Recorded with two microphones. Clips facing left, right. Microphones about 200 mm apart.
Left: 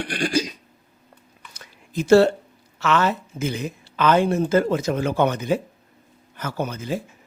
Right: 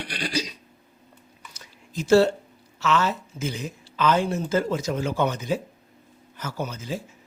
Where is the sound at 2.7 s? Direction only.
60° left (ahead or behind).